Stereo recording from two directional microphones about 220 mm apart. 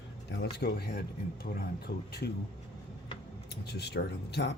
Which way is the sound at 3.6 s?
50° left (ahead or behind).